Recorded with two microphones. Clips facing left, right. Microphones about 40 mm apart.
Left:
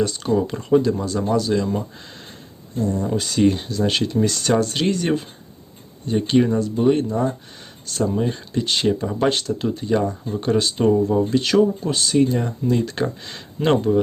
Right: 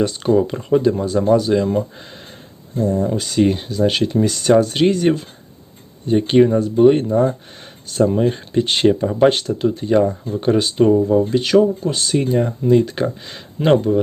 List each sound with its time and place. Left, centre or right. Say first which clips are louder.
0.0 s speech: right 4 dB; right
0.4 s speech: right 2 dB; centre
2.7 s speech: right 4 dB; right
3.0 s speech: even; centre; by 9.0 s right
9.0 s speech: right 6 dB; centre
9.6 s speech: right 5 dB; centre